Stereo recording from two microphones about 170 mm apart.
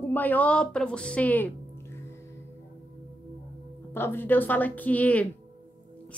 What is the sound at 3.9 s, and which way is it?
Speech, 10° left (ahead or behind).